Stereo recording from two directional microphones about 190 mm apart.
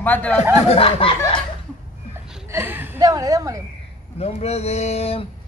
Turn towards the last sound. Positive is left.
turn(degrees=30)  # may be behind; listen again after turning